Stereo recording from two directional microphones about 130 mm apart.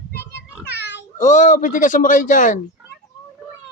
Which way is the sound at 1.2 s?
75° left (ahead or behind).